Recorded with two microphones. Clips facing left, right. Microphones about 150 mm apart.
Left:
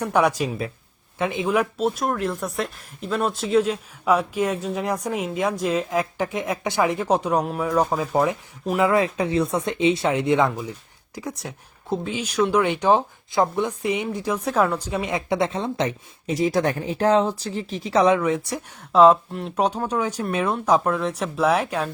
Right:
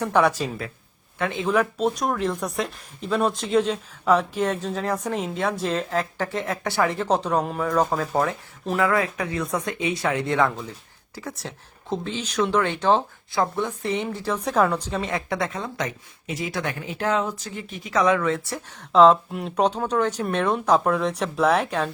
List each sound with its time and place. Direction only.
0.0 s speech: 10° left (ahead or behind); by 18.2 s 30° left (ahead or behind)
18.2 s speech: 15° left (ahead or behind)